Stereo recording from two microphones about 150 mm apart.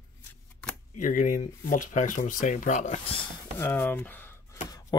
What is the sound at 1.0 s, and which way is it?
Speech, 55° left (ahead or behind).